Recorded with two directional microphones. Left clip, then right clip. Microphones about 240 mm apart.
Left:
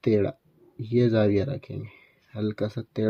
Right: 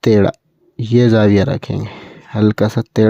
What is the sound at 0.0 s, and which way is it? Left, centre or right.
Speech, right.